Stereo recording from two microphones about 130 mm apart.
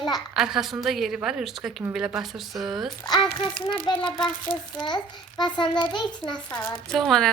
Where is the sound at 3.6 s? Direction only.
35° left (ahead or behind).